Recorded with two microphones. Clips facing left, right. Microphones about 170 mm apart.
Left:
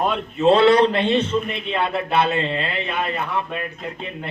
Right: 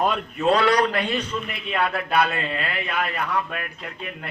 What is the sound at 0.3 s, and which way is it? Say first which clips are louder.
A man's voice: left 6 dB; 25° left (ahead or behind).